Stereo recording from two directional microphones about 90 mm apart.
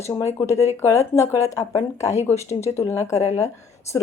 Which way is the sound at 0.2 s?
35° left (ahead or behind).